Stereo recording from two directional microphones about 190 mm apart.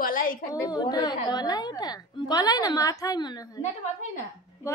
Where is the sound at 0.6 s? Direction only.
20° left (ahead or behind).